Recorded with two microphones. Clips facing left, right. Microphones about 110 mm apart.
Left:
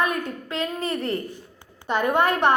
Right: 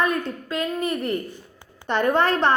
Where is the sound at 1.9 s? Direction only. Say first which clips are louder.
Right 1 dB; 10° left (ahead or behind).